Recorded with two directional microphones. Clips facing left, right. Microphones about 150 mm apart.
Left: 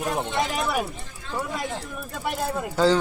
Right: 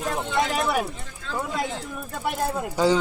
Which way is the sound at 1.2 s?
90° right.